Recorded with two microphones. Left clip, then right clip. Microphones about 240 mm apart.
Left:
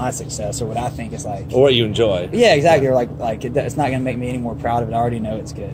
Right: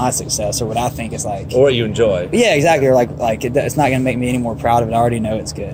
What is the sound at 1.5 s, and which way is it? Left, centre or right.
Speech, left.